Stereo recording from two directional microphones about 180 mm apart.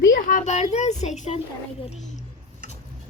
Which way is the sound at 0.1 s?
50° left (ahead or behind).